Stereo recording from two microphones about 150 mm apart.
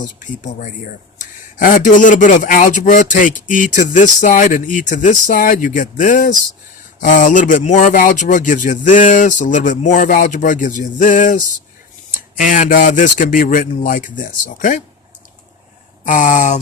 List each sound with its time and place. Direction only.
0.0 s a man's voice: 60° left (ahead or behind)
16.0 s a man's voice: 60° left (ahead or behind)